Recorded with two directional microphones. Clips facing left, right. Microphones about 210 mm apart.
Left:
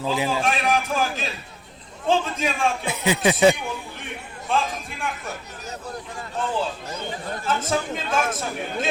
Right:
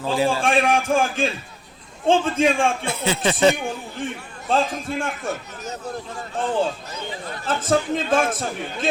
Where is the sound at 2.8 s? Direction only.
15° left (ahead or behind).